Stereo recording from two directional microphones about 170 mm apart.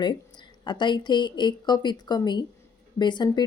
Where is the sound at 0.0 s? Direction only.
25° left (ahead or behind).